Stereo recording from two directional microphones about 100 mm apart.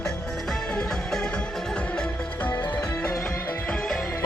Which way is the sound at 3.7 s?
5° left (ahead or behind).